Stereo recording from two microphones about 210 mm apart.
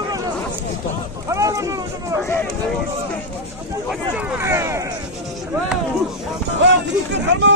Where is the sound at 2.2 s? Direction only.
10° left (ahead or behind).